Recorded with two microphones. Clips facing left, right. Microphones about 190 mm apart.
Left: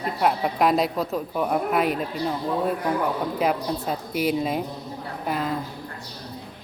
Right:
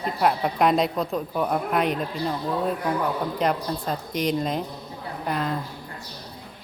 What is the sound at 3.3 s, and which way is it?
Speech, 5° left (ahead or behind).